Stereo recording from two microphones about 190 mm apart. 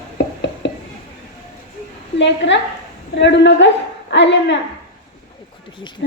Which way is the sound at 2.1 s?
70° left (ahead or behind).